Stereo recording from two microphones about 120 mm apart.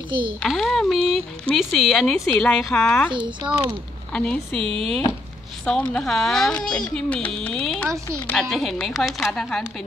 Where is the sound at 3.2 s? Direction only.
40° right (ahead or behind).